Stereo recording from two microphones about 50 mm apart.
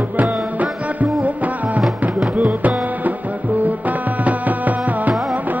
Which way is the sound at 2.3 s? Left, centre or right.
Right.